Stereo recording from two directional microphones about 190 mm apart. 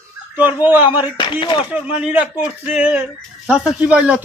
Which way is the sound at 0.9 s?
25° left (ahead or behind).